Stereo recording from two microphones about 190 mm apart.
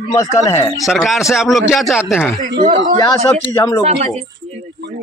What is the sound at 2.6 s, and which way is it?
Speech, 35° right (ahead or behind).